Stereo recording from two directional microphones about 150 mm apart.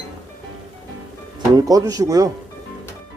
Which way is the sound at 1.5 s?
25° right (ahead or behind).